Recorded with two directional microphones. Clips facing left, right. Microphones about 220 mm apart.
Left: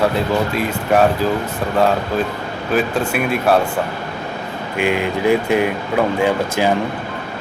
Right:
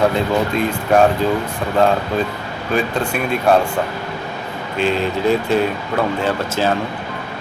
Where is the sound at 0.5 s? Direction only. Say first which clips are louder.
Right 2 dB; 5° left (ahead or behind).